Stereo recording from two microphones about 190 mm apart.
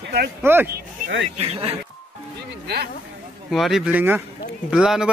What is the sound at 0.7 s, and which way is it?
Speech, 70° right (ahead or behind).